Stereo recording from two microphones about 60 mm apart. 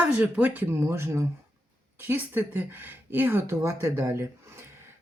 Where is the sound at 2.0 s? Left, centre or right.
Right.